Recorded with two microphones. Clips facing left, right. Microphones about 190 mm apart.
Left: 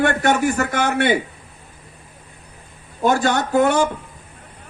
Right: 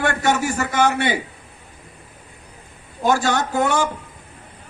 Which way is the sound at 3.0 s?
55° left (ahead or behind).